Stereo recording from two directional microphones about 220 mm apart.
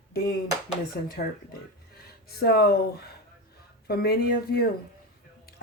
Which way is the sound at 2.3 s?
45° left (ahead or behind).